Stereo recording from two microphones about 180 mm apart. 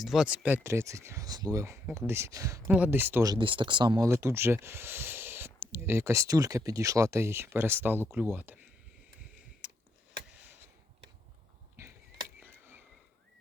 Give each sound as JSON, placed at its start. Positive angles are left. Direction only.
{"t": 0.0, "sound": "speech", "side_deg": 0}
{"t": 3.3, "sound": "speech", "side_deg": -30}
{"t": 9.6, "sound": "tick", "side_deg": -5}
{"t": 10.3, "sound": "a sound", "side_deg": -10}
{"t": 12.4, "sound": "frog", "side_deg": -10}